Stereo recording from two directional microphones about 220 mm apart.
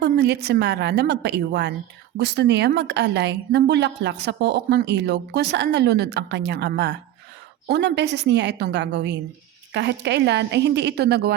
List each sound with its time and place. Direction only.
0.0 s a woman's voice: 50° right (ahead or behind)